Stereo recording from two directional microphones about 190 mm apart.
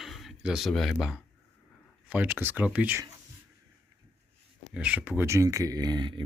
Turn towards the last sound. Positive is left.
turn(degrees=-25)  # may be behind; listen again after turning